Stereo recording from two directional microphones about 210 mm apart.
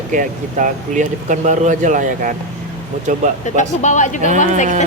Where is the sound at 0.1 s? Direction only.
40° right (ahead or behind).